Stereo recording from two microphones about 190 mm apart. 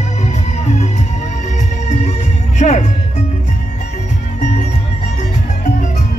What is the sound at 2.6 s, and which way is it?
Music, 40° left (ahead or behind).